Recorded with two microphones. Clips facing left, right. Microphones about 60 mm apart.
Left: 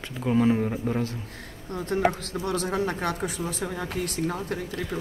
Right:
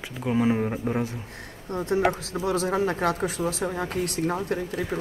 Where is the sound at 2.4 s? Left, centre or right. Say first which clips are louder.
Right 3 dB; right.